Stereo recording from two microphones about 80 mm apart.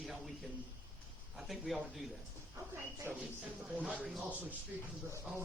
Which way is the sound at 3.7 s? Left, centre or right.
Centre.